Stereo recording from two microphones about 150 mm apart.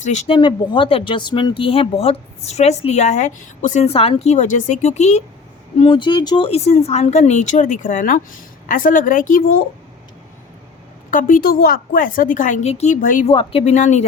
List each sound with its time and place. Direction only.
0.0 s speech: 50° left (ahead or behind)
0.3 s speech: 30° left (ahead or behind); by 5.2 s 50° left (ahead or behind)
5.8 s a woman's voice: 30° left (ahead or behind); by 9.6 s 65° left (ahead or behind)
11.1 s a woman's voice: 65° left (ahead or behind)
13.2 s speech: 35° left (ahead or behind)